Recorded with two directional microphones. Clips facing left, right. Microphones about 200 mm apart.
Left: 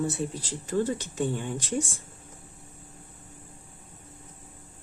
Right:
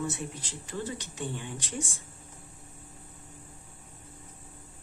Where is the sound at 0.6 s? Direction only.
45° left (ahead or behind).